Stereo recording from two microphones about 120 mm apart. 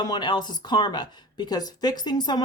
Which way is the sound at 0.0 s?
40° left (ahead or behind).